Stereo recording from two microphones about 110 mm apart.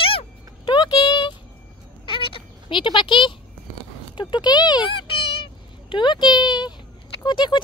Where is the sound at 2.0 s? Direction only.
55° left (ahead or behind).